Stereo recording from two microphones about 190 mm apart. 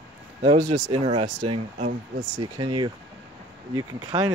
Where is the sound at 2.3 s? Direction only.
25° right (ahead or behind).